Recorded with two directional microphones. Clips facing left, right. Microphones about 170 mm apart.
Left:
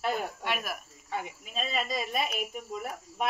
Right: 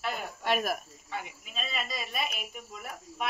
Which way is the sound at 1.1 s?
40° left (ahead or behind).